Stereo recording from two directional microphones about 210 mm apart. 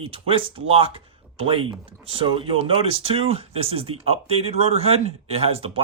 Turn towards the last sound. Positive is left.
turn(degrees=-25)  # may be behind; listen again after turning